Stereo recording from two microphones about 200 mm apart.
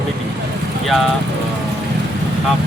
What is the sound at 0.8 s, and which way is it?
Speech, centre (ahead or behind).